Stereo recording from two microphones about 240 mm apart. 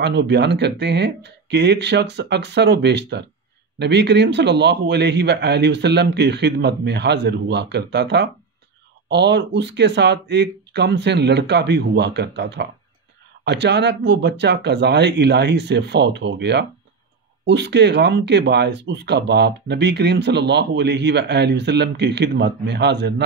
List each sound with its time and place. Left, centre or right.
0.0 s speech: right